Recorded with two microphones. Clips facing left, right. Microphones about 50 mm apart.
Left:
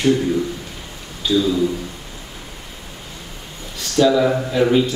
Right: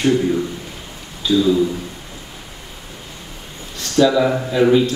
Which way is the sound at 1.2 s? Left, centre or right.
Centre.